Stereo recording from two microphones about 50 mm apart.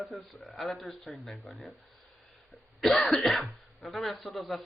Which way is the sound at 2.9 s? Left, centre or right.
Centre.